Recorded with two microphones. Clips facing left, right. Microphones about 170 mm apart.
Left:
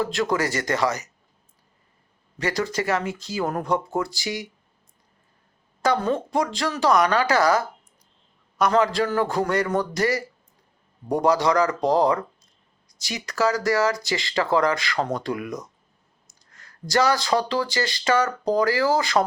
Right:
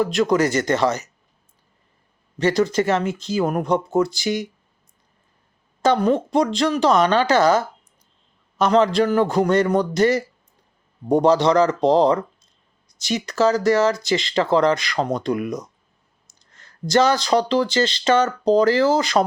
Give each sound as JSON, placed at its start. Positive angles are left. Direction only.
{"t": 0.0, "sound": "speech", "side_deg": -20}
{"t": 2.4, "sound": "speech", "side_deg": -20}
{"t": 5.8, "sound": "speech", "side_deg": -20}